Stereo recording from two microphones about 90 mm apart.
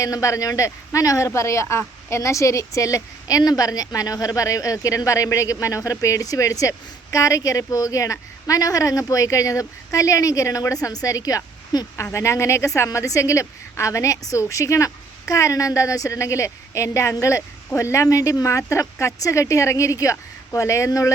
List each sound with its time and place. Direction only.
0.0 s speech: 35° left (ahead or behind)
12.1 s speech: 30° left (ahead or behind)